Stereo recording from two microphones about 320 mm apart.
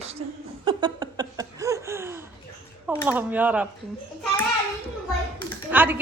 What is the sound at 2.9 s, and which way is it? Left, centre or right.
Speech, centre.